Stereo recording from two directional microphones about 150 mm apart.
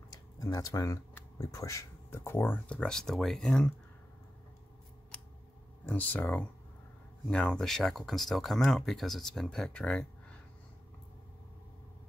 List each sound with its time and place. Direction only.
0.1 s tick-tock: 25° left (ahead or behind)
1.4 s speech: 20° left (ahead or behind); by 3.7 s 5° left (ahead or behind)
5.9 s speech: 10° left (ahead or behind)